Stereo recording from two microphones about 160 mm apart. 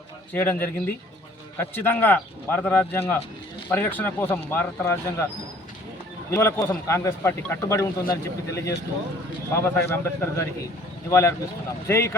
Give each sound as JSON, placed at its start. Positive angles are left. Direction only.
{"t": 0.3, "sound": "a man's voice", "side_deg": 10}
{"t": 6.3, "sound": "a man's voice", "side_deg": 15}